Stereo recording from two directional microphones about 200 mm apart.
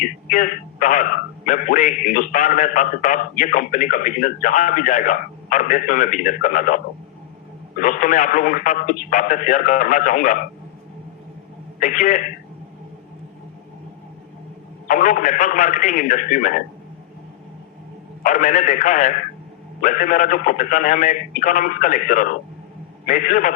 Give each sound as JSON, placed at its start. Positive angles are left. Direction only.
{"t": 0.0, "sound": "a man's voice", "side_deg": 40}
{"t": 7.8, "sound": "a man's voice", "side_deg": 40}
{"t": 11.8, "sound": "a man's voice", "side_deg": 40}
{"t": 14.8, "sound": "a man's voice", "side_deg": 40}
{"t": 18.2, "sound": "a man's voice", "side_deg": 40}